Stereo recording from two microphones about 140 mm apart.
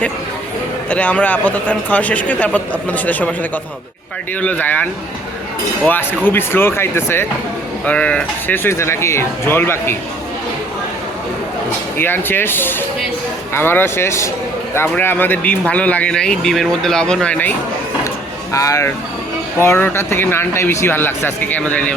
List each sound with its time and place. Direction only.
0.9 s speech: 10° left (ahead or behind)
4.4 s speech: 10° left (ahead or behind)
11.9 s speech: 15° left (ahead or behind)
18.5 s speech: 25° left (ahead or behind)